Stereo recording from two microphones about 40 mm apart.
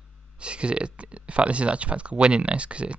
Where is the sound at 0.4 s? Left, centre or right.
Right.